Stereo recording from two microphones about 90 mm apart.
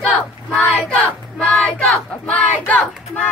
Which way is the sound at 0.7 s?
15° left (ahead or behind).